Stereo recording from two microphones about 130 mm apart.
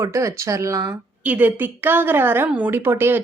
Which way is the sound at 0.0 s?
25° right (ahead or behind).